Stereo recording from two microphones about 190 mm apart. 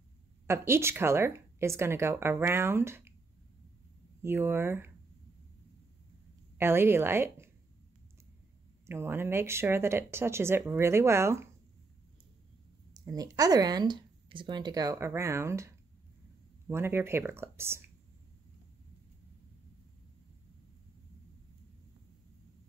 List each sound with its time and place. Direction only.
0.5 s speech: 15° right (ahead or behind)
4.2 s speech: 10° right (ahead or behind)
6.6 s speech: 10° right (ahead or behind)
8.8 s speech: 15° right (ahead or behind)
13.0 s speech: 20° right (ahead or behind)